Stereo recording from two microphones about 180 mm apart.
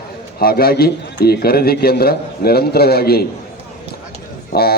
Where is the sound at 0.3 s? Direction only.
55° left (ahead or behind).